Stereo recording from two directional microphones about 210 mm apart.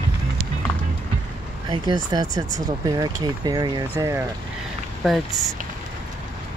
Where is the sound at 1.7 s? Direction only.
20° right (ahead or behind).